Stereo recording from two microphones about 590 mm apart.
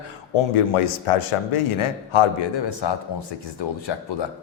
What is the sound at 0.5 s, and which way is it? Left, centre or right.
A man's voice, left.